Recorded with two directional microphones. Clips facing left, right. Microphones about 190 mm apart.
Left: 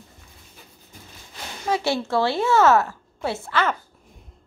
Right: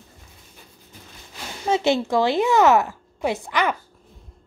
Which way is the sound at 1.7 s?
20° right (ahead or behind).